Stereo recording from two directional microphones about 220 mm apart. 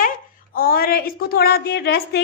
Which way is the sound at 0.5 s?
40° left (ahead or behind).